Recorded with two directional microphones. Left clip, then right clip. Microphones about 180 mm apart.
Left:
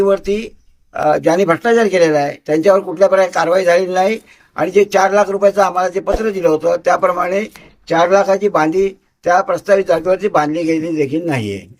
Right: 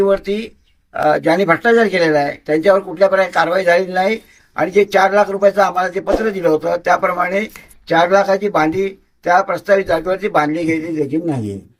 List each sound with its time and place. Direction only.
0.0 s speech: 5° left (ahead or behind)